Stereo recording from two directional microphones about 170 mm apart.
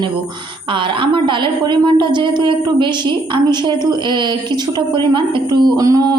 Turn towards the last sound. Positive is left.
turn(degrees=-20)  # may be behind; listen again after turning